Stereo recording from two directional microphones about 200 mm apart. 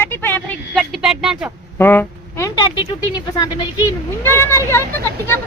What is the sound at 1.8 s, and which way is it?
Speech, 10° left (ahead or behind).